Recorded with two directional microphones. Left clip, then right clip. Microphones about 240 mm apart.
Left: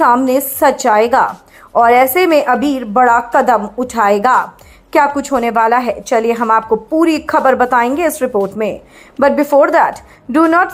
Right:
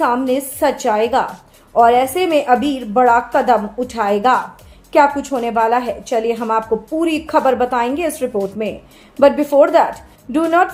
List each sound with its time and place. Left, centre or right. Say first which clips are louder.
0.0 s a woman's voice: left 6 dB; left